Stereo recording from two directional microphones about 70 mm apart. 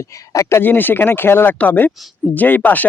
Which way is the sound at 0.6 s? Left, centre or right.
Left.